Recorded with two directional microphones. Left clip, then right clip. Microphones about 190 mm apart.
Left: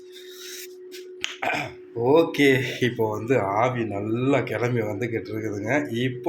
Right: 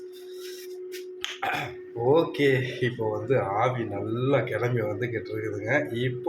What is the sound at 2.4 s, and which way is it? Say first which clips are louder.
Speech: left 4 dB; 50° left (ahead or behind).